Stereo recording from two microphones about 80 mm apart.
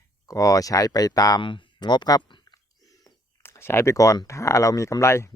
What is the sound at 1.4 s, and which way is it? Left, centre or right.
Speech, left.